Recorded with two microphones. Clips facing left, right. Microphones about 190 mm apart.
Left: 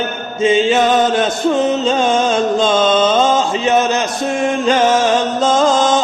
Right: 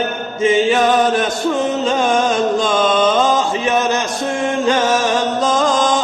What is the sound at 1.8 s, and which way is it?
Music, 25° left (ahead or behind).